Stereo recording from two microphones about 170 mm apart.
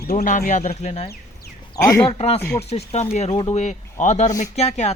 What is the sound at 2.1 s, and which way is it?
Speech, 35° left (ahead or behind).